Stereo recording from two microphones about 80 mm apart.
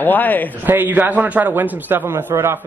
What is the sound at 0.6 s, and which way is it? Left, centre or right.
A man's voice, right.